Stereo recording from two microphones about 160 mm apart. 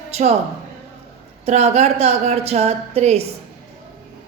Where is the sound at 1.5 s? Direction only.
45° right (ahead or behind).